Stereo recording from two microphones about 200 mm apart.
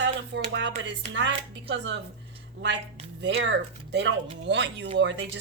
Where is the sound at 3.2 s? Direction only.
60° right (ahead or behind).